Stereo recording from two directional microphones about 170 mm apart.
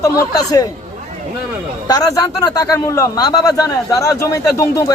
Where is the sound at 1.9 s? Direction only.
20° left (ahead or behind).